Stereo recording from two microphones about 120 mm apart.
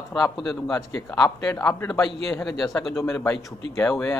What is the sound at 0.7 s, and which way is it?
A man's voice, 25° left (ahead or behind).